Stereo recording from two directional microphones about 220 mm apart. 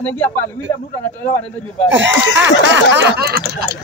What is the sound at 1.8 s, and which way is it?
Speech, 55° right (ahead or behind).